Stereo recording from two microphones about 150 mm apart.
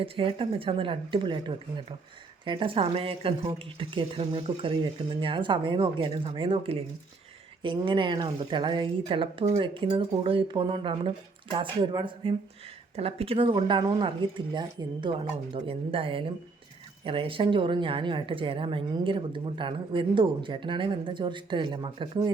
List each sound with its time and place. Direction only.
0.0 s a woman's voice: 35° right (ahead or behind)